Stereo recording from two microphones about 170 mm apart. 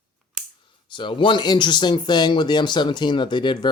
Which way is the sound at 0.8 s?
30° left (ahead or behind).